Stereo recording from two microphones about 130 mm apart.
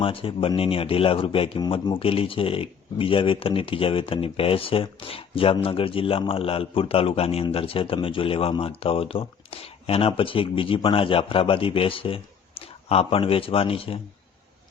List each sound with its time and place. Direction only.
0.0 s speech: 45° left (ahead or behind)